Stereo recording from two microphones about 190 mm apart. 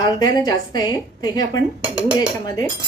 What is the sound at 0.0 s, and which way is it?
A woman's voice, 20° left (ahead or behind).